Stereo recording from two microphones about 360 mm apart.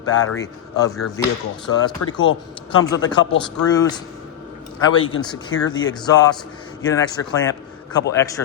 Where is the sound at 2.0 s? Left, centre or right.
Left.